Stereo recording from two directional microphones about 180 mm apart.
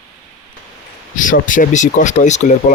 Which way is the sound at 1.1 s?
45° left (ahead or behind).